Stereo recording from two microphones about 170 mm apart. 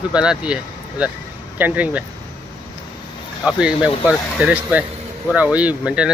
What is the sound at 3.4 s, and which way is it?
Speech, 5° right (ahead or behind).